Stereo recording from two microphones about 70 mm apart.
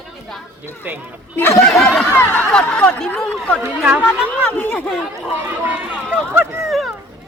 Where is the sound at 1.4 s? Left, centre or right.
Left.